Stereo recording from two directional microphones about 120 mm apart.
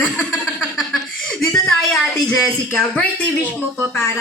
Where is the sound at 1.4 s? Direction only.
Centre (ahead or behind).